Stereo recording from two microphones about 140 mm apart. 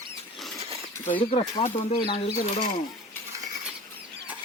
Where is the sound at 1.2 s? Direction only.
45° left (ahead or behind).